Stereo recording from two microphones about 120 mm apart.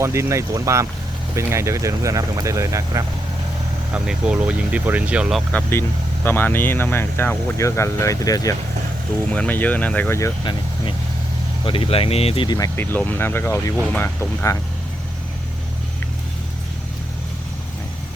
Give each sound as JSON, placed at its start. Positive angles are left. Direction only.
{"t": 0.0, "sound": "speech", "side_deg": -25}
{"t": 3.9, "sound": "speech", "side_deg": -5}
{"t": 5.5, "sound": "speech", "side_deg": 10}
{"t": 9.3, "sound": "speech", "side_deg": 10}
{"t": 11.6, "sound": "speech", "side_deg": 50}
{"t": 12.5, "sound": "speech", "side_deg": 30}
{"t": 12.8, "sound": "speech", "side_deg": 15}